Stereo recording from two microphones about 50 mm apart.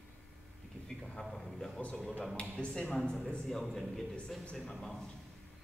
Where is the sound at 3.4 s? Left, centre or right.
Centre.